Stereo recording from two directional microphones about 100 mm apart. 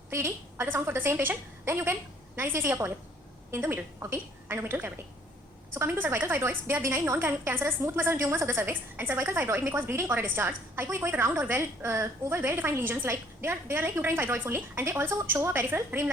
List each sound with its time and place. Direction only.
0.1 s a woman's voice: 25° right (ahead or behind)